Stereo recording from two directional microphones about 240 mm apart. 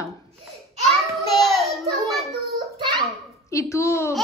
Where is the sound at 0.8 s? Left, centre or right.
Centre.